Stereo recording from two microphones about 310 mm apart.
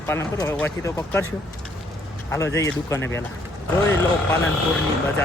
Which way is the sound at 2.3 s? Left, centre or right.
Centre.